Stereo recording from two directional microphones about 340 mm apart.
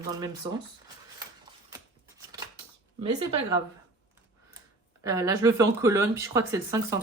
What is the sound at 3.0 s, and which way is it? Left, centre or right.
Speech, centre.